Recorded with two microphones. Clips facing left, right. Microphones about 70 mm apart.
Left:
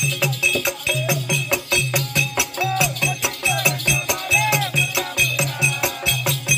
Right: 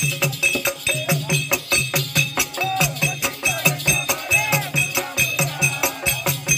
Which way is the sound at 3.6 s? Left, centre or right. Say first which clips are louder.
Even; centre.